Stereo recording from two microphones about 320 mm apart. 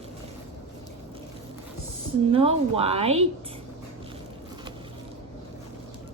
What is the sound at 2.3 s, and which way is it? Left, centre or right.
Speech, centre.